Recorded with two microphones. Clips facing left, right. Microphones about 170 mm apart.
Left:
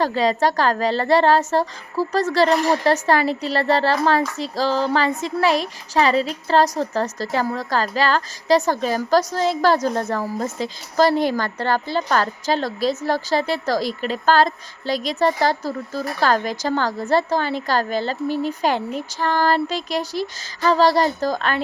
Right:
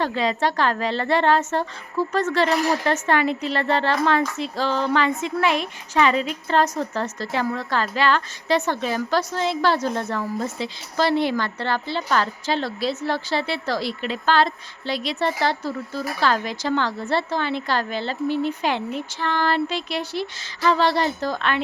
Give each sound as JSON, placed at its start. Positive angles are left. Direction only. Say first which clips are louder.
{"t": 0.0, "sound": "a woman's voice", "louder": "left 4 dB", "side_deg": 40}